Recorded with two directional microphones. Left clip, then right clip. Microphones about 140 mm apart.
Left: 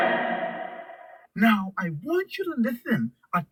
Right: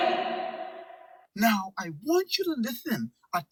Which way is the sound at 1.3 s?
25° right (ahead or behind).